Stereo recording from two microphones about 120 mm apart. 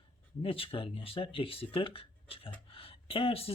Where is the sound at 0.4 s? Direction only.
50° left (ahead or behind).